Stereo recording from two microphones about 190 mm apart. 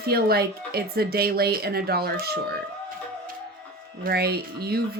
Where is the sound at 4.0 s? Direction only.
55° right (ahead or behind).